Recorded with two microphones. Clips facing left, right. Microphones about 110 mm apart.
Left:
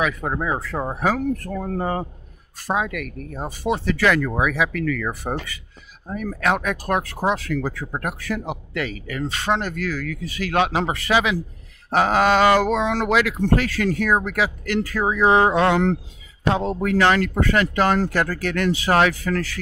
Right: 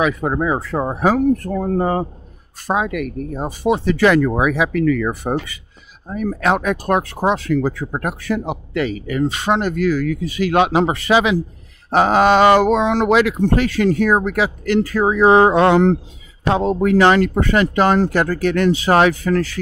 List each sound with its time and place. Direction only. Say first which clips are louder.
0.0 s speech: right 5 dB; 25° right (ahead or behind)